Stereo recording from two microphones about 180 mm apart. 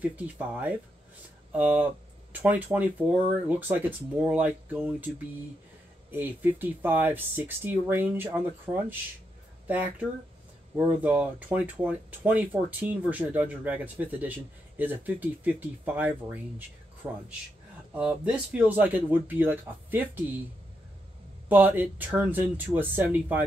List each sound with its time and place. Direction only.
0.1 s speech: 10° right (ahead or behind)
6.1 s speech: 10° right (ahead or behind)
21.5 s speech: 10° right (ahead or behind)